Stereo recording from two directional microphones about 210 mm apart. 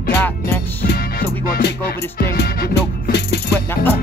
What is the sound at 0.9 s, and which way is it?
Music, 45° left (ahead or behind).